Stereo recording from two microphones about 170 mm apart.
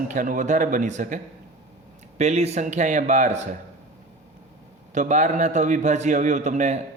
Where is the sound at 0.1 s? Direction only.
50° right (ahead or behind).